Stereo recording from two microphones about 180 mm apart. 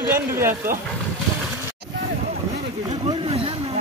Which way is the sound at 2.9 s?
35° right (ahead or behind).